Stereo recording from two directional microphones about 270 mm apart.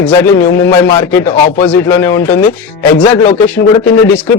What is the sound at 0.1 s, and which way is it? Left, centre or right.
Speech, centre.